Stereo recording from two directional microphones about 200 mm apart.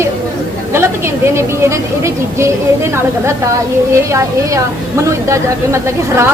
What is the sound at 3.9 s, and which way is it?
Speech, 15° right (ahead or behind).